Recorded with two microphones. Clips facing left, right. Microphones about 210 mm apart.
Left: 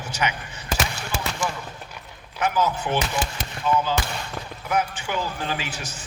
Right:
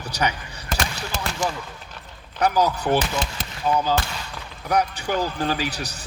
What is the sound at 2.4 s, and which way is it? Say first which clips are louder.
Speech: right 3 dB; 35° right (ahead or behind).